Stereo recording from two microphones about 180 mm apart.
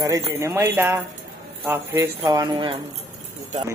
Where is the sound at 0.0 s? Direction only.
15° right (ahead or behind).